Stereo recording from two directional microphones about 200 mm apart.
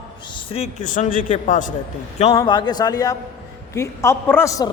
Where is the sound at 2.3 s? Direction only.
20° left (ahead or behind).